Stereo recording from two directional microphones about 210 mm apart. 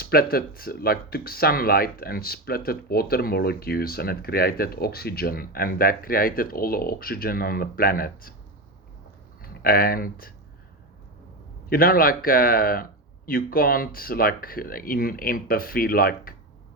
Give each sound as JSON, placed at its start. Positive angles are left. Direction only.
{"t": 0.0, "sound": "speech", "side_deg": 45}
{"t": 9.4, "sound": "speech", "side_deg": 45}
{"t": 11.7, "sound": "speech", "side_deg": 45}